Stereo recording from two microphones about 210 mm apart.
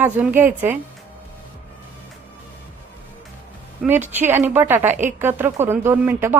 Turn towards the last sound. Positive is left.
turn(degrees=-10)  # may be behind; listen again after turning